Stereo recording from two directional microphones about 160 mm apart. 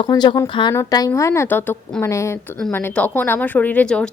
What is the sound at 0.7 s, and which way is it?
A woman's voice, 20° left (ahead or behind).